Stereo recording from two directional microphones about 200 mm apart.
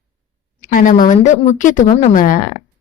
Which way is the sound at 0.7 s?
40° left (ahead or behind).